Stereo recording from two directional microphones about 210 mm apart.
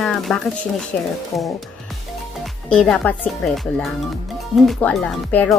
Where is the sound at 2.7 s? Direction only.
5° left (ahead or behind).